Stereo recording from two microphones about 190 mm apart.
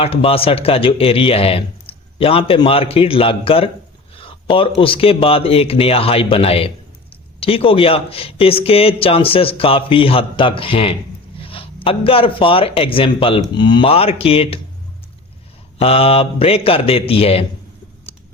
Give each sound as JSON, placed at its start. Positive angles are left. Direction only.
{"t": 0.0, "sound": "speech", "side_deg": 30}
{"t": 15.8, "sound": "speech", "side_deg": 30}